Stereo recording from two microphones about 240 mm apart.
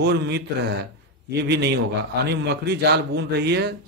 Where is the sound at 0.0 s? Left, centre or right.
Right.